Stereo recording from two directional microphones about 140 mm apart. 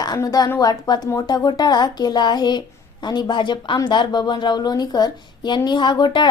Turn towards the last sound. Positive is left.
turn(degrees=30)  # may be behind; listen again after turning